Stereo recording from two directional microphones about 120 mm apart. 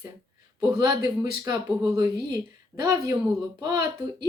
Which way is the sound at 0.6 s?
30° right (ahead or behind).